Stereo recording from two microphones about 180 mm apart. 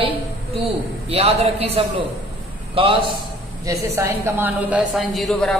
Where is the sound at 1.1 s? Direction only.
35° right (ahead or behind).